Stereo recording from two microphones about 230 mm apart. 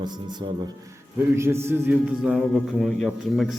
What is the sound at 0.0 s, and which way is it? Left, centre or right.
A man's voice, centre.